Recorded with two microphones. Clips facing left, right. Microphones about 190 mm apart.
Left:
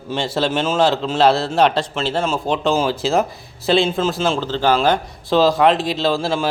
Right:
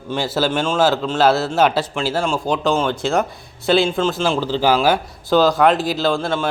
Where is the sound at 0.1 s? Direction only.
Centre (ahead or behind).